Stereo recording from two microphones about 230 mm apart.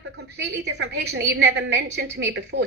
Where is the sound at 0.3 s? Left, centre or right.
Right.